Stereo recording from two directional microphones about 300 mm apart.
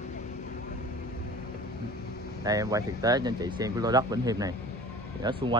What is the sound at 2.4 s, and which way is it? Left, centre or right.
Speech, centre.